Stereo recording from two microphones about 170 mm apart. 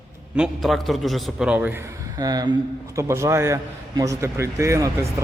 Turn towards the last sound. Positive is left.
turn(degrees=-15)  # may be behind; listen again after turning